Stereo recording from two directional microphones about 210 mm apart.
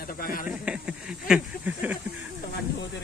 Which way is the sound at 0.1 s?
45° left (ahead or behind).